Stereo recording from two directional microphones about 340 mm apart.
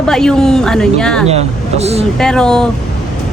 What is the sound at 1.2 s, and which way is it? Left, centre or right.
Speech, centre.